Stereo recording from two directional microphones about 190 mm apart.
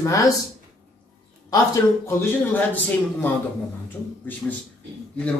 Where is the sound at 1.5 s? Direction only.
15° left (ahead or behind).